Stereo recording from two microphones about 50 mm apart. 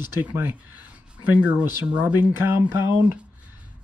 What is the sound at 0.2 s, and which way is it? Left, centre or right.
Speech, right.